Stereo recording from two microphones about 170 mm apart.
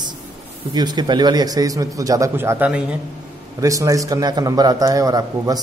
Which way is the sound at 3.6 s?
20° right (ahead or behind).